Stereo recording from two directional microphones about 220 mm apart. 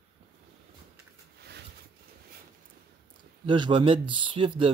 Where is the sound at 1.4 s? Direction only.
50° right (ahead or behind).